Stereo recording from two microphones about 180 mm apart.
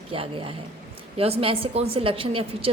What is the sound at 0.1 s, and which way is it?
A woman's voice, 30° right (ahead or behind).